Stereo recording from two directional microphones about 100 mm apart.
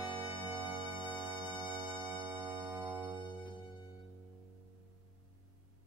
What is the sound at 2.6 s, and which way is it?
Organ, 45° right (ahead or behind).